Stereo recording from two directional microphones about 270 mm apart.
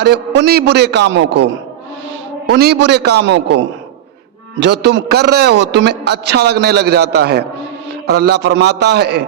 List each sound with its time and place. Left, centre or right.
0.0 s a man's voice: right
2.5 s a man's voice: right
4.6 s a man's voice: right